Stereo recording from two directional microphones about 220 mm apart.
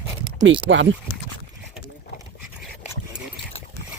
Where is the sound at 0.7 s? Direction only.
55° right (ahead or behind).